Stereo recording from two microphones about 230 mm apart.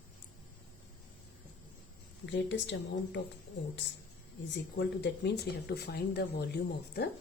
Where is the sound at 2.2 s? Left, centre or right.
Left.